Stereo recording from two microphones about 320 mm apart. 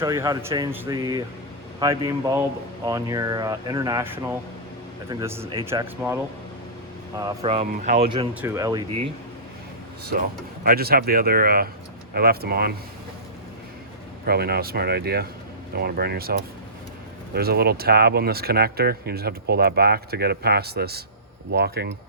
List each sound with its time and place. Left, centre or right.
0.0 s speech: centre
7.2 s speech: centre
10.1 s speech: right
14.3 s speech: right
17.3 s speech: right